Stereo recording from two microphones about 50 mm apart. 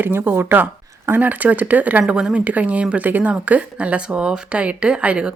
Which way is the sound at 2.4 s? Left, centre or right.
Right.